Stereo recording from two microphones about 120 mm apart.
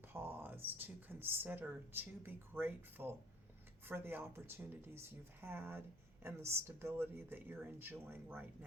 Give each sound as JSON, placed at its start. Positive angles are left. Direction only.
{"t": 0.1, "sound": "speech", "side_deg": -20}